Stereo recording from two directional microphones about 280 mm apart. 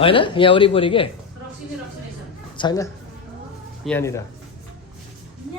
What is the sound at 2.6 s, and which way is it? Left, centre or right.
Speech, centre.